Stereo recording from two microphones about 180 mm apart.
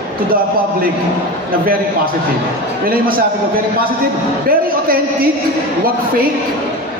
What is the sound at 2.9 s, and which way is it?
A man's voice, 55° right (ahead or behind).